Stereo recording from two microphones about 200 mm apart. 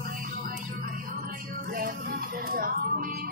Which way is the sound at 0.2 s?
45° right (ahead or behind).